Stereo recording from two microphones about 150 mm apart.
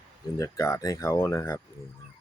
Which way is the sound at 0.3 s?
20° left (ahead or behind).